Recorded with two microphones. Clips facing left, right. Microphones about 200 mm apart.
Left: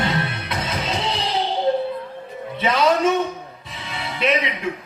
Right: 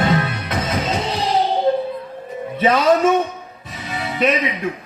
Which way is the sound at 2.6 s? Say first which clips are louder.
Right 3 dB; 50° right (ahead or behind).